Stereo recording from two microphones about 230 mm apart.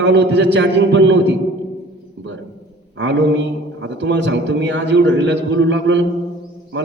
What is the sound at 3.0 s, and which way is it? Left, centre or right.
A man's voice, right.